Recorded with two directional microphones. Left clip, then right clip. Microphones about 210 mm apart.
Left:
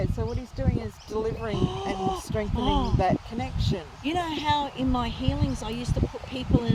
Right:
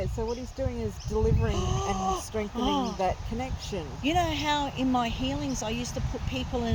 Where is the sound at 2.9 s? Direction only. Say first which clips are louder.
Left 3 dB; 30° left (ahead or behind).